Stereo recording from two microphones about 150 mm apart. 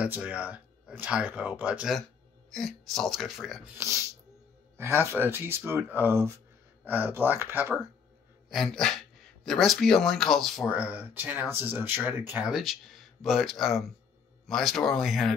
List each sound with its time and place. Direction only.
0.0 s speech: 10° right (ahead or behind)
3.7 s speech: 20° right (ahead or behind)
8.5 s speech: centre (ahead or behind)
10.7 s speech: 10° right (ahead or behind)